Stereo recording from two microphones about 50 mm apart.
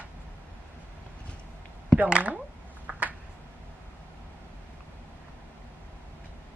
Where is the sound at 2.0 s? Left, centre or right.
Right.